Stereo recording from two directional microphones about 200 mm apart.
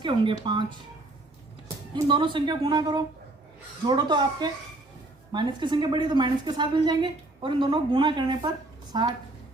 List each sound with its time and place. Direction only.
0.0 s a woman's voice: 25° right (ahead or behind)
1.6 s a woman's voice: 25° right (ahead or behind)